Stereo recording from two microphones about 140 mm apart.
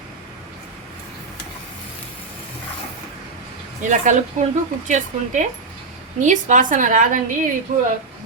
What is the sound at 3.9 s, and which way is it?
A woman's voice, 60° right (ahead or behind).